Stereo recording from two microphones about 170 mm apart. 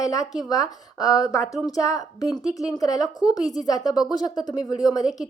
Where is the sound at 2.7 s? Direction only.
20° left (ahead or behind).